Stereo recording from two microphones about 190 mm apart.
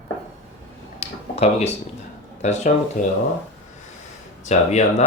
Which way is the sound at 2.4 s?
35° left (ahead or behind).